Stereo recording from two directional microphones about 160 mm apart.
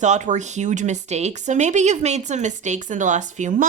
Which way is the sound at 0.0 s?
50° right (ahead or behind).